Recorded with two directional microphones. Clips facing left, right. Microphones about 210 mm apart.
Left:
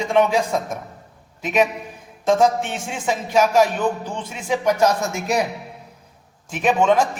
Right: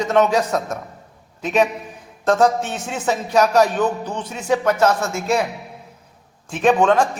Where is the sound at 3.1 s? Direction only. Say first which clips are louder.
Right 1 dB; 10° left (ahead or behind).